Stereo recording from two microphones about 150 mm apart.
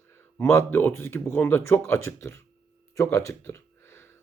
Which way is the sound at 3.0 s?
20° left (ahead or behind).